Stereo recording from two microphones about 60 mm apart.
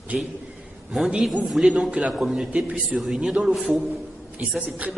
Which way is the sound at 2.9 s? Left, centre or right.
Centre.